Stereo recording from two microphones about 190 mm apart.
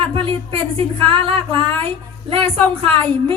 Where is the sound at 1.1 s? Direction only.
30° right (ahead or behind).